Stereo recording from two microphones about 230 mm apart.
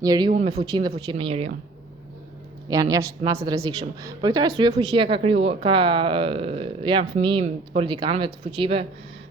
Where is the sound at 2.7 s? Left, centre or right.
Centre.